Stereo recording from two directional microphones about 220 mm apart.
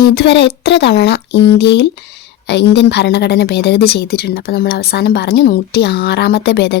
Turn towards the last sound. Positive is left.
turn(degrees=50)  # may be behind; listen again after turning